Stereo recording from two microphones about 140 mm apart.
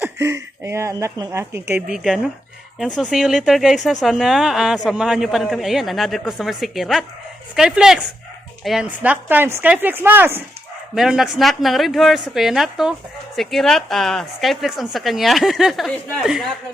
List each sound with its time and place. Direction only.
0.2 s speech: 20° right (ahead or behind)
1.9 s speech: 5° right (ahead or behind)
10.9 s speech: 5° right (ahead or behind)